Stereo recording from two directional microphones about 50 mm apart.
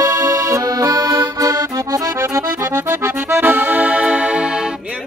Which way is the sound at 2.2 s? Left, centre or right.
Right.